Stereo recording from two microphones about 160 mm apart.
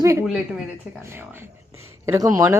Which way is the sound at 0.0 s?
15° right (ahead or behind).